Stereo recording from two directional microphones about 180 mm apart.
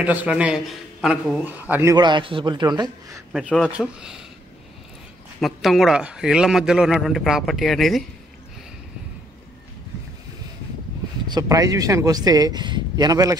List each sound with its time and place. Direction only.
0.0 s a man's voice: 10° right (ahead or behind)
3.4 s a man's voice: centre (ahead or behind)
5.4 s a man's voice: centre (ahead or behind)
11.2 s a man's voice: 20° right (ahead or behind)